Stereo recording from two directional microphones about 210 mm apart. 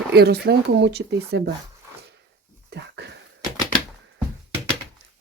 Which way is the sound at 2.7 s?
55° right (ahead or behind).